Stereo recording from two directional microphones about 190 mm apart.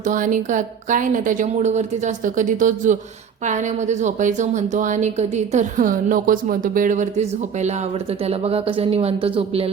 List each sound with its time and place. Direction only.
0.1 s a woman's voice: 45° right (ahead or behind)